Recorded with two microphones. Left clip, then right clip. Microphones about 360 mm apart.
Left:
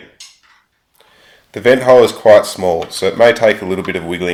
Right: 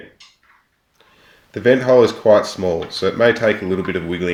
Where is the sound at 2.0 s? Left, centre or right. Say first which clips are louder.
Left 5 dB; centre.